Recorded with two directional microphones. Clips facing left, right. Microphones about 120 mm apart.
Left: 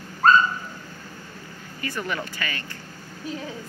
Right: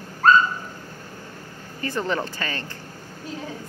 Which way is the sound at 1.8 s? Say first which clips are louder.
Right 4 dB; 30° right (ahead or behind).